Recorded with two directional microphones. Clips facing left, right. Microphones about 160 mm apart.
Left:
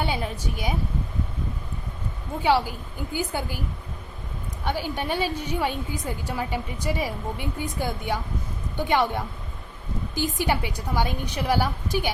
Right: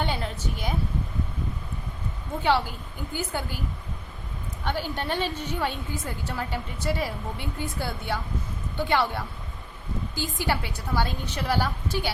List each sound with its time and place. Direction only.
0.0 s a woman's voice: 10° left (ahead or behind)
2.4 s a woman's voice: 10° left (ahead or behind)
4.6 s a woman's voice: 10° left (ahead or behind)